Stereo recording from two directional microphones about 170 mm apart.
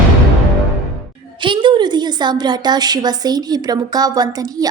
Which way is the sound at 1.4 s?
30° right (ahead or behind).